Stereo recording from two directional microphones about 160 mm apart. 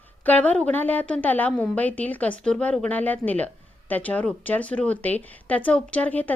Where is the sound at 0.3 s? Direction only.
10° left (ahead or behind).